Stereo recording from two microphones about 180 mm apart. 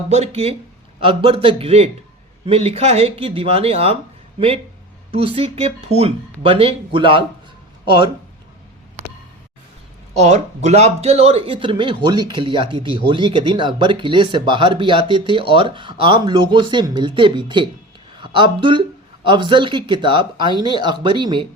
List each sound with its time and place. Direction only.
0.1 s a man's voice: 35° right (ahead or behind)
10.2 s a man's voice: 40° right (ahead or behind)